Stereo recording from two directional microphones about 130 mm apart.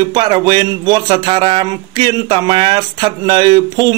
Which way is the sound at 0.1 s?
35° right (ahead or behind).